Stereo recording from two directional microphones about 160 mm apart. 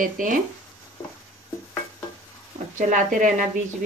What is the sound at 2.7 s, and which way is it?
Speech, 55° right (ahead or behind).